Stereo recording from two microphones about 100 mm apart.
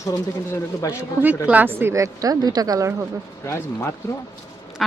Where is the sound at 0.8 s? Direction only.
30° left (ahead or behind).